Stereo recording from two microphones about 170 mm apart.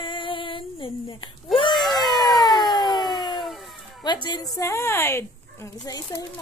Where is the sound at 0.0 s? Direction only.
30° left (ahead or behind).